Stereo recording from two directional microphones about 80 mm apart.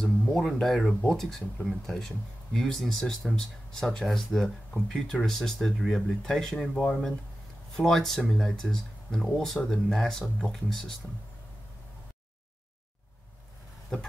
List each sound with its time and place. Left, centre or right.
0.0 s speech: centre